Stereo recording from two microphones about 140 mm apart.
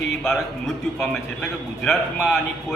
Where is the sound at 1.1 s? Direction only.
5° left (ahead or behind).